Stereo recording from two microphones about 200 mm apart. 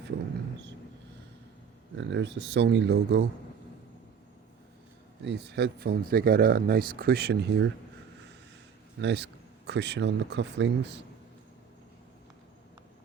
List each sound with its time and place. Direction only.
2.0 s speech: 60° right (ahead or behind)
5.2 s speech: 55° right (ahead or behind)
9.0 s speech: 60° right (ahead or behind)